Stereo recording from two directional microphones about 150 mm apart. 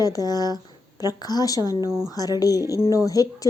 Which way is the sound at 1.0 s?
25° left (ahead or behind).